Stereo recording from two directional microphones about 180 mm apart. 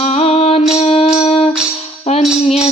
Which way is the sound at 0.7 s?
35° left (ahead or behind).